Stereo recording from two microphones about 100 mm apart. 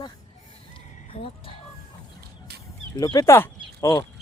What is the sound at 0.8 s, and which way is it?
Music, 70° left (ahead or behind).